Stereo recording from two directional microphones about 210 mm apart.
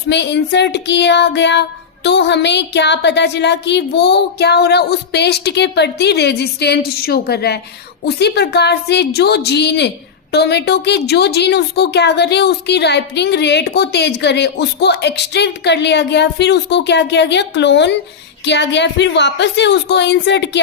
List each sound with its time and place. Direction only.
0.1 s a woman's voice: 55° left (ahead or behind)